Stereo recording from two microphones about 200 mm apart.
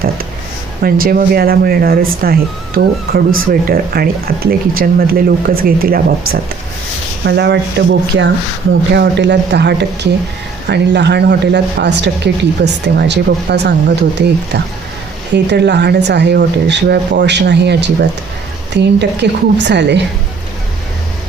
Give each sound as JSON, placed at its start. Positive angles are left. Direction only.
{"t": 0.8, "sound": "speech", "side_deg": -45}